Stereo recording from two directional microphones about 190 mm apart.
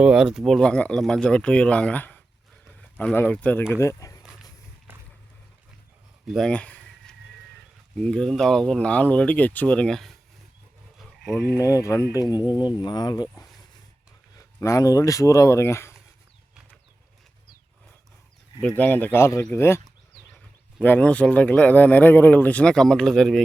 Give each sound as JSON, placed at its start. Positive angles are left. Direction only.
{"t": 0.0, "sound": "speech", "side_deg": -5}
{"t": 4.9, "sound": "vehicle", "side_deg": -10}
{"t": 6.2, "sound": "a sound", "side_deg": 0}
{"t": 7.9, "sound": "speech", "side_deg": 5}
{"t": 11.6, "sound": "speech", "side_deg": 15}
{"t": 18.8, "sound": "speech", "side_deg": 10}
{"t": 20.8, "sound": "speech", "side_deg": 10}